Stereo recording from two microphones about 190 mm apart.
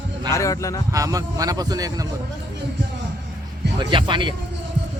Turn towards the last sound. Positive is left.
turn(degrees=-25)  # may be behind; listen again after turning